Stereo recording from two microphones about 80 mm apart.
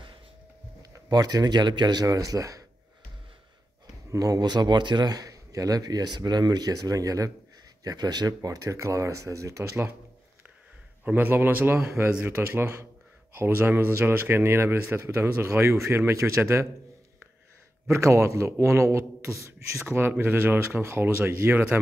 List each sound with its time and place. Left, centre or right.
0.9 s a man's voice: right
4.1 s a man's voice: right
11.1 s a man's voice: right
17.8 s a man's voice: right